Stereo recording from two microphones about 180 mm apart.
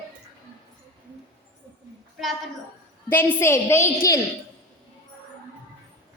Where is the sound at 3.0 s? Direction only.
10° left (ahead or behind).